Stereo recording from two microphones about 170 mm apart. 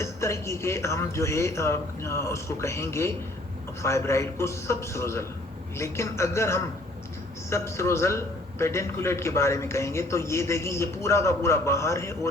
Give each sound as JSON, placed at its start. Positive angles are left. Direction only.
{"t": 0.0, "sound": "a man's voice", "side_deg": 15}